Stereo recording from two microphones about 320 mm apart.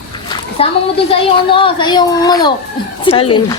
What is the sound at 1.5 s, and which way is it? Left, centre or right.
Speech, centre.